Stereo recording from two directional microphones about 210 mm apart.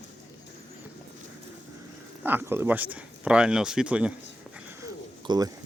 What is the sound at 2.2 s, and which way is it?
Speech, 10° right (ahead or behind).